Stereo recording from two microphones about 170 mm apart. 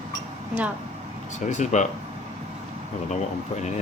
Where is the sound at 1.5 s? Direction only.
45° left (ahead or behind).